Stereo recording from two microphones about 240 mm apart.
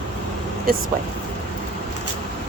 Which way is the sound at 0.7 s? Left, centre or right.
Right.